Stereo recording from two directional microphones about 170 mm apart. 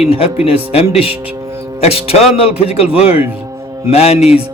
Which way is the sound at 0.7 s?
35° left (ahead or behind).